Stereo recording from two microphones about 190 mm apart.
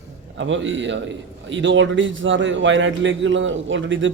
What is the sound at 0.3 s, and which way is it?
A man's voice, 80° right.